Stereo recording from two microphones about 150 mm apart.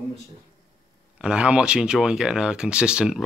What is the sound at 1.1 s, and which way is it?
Speech, 5° right (ahead or behind).